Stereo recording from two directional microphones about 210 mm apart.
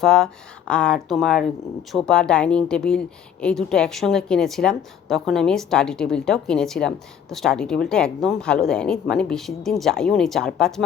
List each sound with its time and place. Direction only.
0.0 s a woman's voice: centre (ahead or behind)